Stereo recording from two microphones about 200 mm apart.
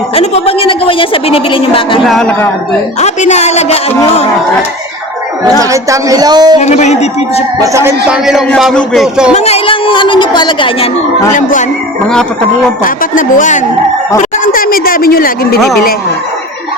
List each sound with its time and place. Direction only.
0.1 s a woman's voice: 30° left (ahead or behind)
2.0 s a man's voice: 5° left (ahead or behind)
3.0 s a woman's voice: 35° left (ahead or behind)
5.5 s speech: 15° right (ahead or behind)
6.6 s a woman's voice: 35° left (ahead or behind)
7.6 s speech: 15° right (ahead or behind)
8.2 s a man's voice: centre (ahead or behind)
9.3 s a woman's voice: 30° left (ahead or behind)
12.8 s a woman's voice: 40° left (ahead or behind)